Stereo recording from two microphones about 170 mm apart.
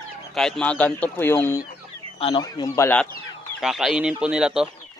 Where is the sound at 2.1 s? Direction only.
30° left (ahead or behind).